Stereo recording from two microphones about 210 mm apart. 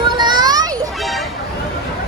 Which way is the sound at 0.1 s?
20° right (ahead or behind).